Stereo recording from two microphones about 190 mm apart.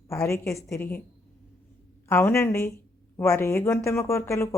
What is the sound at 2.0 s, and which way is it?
Speech, 10° left (ahead or behind).